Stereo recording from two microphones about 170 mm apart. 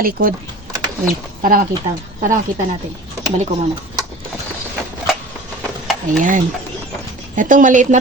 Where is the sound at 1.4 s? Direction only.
55° right (ahead or behind).